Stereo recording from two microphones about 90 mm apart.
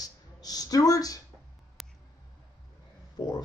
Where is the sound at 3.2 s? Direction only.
45° left (ahead or behind).